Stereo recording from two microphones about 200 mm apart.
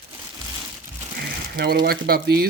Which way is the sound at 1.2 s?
50° right (ahead or behind).